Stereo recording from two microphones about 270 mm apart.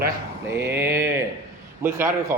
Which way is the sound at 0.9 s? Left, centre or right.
Right.